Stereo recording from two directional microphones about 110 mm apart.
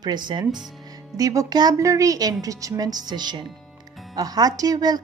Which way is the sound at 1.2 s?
30° right (ahead or behind).